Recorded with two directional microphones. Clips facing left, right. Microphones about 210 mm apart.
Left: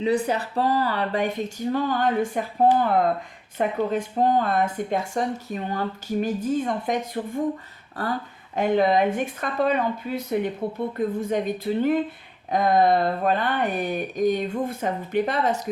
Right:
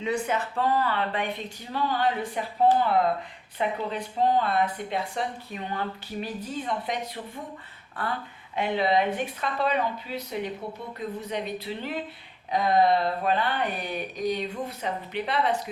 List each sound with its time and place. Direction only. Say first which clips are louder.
0.0 s speech: left 5 dB; 35° left (ahead or behind)